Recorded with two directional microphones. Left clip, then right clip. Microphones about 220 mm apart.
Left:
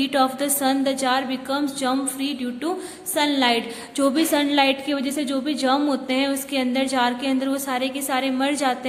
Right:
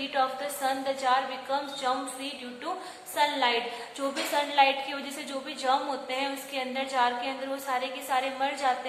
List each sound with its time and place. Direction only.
0.0 s a woman's voice: 45° left (ahead or behind)